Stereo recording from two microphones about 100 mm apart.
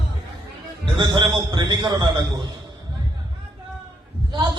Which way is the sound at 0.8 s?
50° right (ahead or behind).